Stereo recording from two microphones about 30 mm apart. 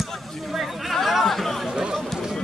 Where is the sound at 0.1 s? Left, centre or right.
Centre.